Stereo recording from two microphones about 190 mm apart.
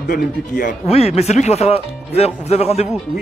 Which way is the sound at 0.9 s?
35° left (ahead or behind).